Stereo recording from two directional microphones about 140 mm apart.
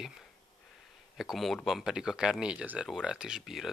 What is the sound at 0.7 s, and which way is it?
Speech, centre (ahead or behind).